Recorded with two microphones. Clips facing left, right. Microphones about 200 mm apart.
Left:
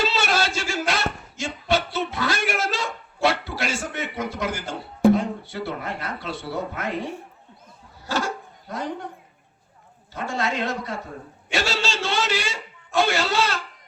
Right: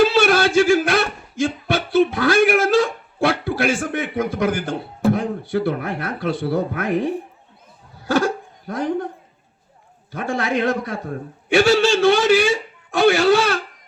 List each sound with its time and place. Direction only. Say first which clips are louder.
0.0 s a sound: right 9 dB; 60° right (ahead or behind)
8.6 s a man's voice: right 8 dB; 55° right (ahead or behind)
10.1 s a man's voice: right 5 dB; 60° right (ahead or behind)